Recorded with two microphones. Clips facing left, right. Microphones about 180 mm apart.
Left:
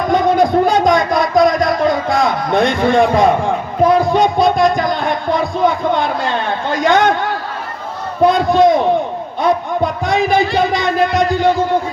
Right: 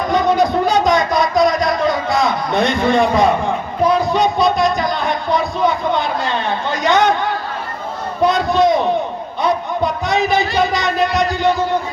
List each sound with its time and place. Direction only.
0.1 s a sound: 50° left (ahead or behind)
2.0 s a man's voice: 50° left (ahead or behind)
3.8 s music: 50° left (ahead or behind)
8.3 s a man's voice: 50° left (ahead or behind)